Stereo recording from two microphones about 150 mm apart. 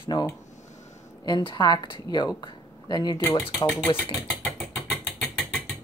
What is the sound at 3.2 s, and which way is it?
Speech, 15° left (ahead or behind).